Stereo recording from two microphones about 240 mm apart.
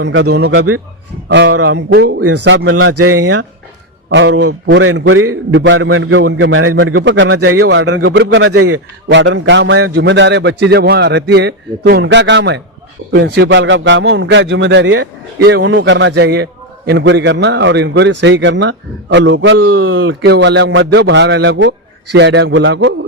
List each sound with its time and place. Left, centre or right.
0.0 s a man's voice: right
2.4 s a man's voice: right
4.1 s a man's voice: right
5.5 s a man's voice: right
9.0 s a man's voice: right